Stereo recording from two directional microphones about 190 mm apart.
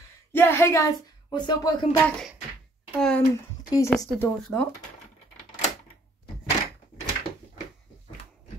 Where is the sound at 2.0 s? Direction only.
5° left (ahead or behind).